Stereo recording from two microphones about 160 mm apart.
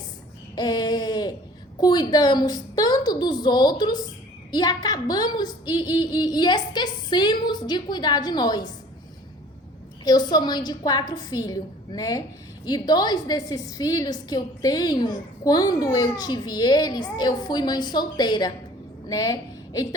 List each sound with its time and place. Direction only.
0.5 s a sound: 25° left (ahead or behind)
1.8 s a woman's voice: 25° left (ahead or behind)
10.0 s a woman's voice: 25° left (ahead or behind)